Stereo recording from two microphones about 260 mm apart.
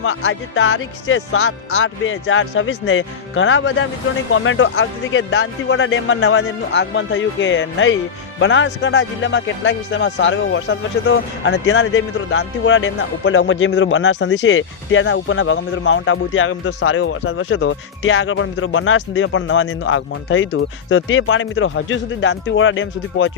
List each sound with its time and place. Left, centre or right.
0.0 s speech: left